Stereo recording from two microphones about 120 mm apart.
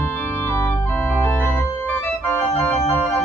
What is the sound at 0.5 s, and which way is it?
Organ, 20° left (ahead or behind).